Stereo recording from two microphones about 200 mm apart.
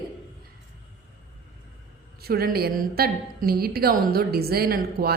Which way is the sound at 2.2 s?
50° right (ahead or behind).